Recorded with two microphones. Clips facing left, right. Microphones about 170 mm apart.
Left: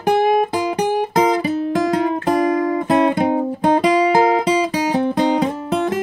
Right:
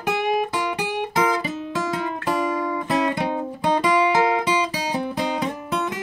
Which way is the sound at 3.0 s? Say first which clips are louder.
Left 7 dB; 50° left (ahead or behind).